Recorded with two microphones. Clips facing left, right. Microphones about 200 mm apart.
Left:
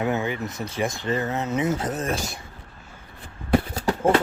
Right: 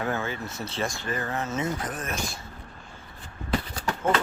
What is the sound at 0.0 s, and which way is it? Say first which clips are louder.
Speech: left 5 dB; 20° left (ahead or behind).